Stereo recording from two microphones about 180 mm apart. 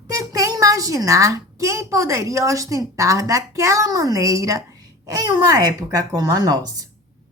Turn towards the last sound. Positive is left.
turn(degrees=-20)  # may be behind; listen again after turning